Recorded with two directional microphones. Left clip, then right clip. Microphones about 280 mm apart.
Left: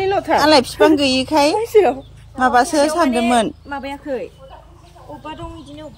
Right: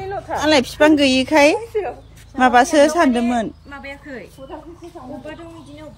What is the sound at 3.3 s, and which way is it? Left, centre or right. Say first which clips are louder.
Speech: left 6 dB; centre.